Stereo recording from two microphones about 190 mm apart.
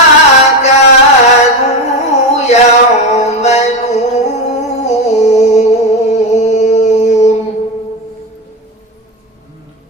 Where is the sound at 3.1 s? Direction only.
35° left (ahead or behind).